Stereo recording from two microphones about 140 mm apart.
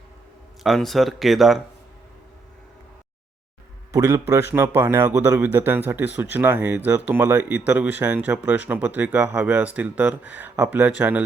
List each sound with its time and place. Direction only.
0.6 s speech: centre (ahead or behind)
3.9 s speech: 20° right (ahead or behind)